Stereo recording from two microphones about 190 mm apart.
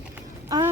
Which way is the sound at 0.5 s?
20° right (ahead or behind).